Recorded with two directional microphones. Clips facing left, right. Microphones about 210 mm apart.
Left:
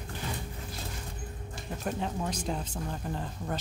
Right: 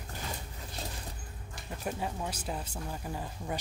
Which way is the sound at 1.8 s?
5° right (ahead or behind).